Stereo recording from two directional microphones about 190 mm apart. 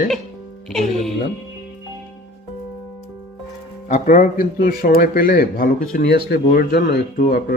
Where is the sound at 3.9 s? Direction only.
45° left (ahead or behind).